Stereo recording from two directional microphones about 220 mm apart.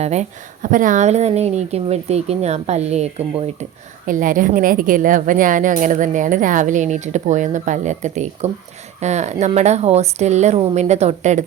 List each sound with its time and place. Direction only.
0.0 s speech: 30° right (ahead or behind)